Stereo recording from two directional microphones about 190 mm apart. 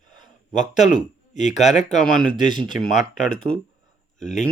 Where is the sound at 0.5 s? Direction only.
40° left (ahead or behind).